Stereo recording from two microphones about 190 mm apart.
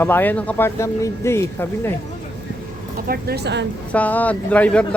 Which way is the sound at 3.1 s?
55° right (ahead or behind).